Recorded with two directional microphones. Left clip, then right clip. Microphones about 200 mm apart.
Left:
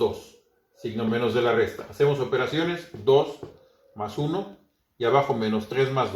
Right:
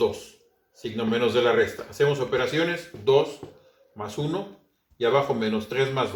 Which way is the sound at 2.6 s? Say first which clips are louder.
Right 2 dB; 40° left (ahead or behind).